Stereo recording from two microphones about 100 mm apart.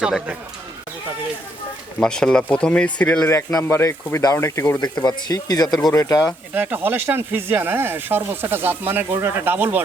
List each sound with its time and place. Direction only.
0.0 s speech: 10° right (ahead or behind)
2.0 s speech: 5° left (ahead or behind)
3.6 s speech: 25° left (ahead or behind)
4.8 s speech: 45° left (ahead or behind)
6.5 s speech: 20° right (ahead or behind)